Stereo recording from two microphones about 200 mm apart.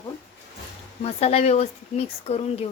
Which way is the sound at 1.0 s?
30° left (ahead or behind).